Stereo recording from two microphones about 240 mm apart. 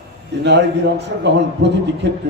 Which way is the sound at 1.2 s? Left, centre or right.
Right.